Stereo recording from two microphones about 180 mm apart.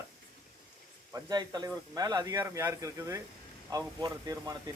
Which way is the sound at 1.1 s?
20° right (ahead or behind).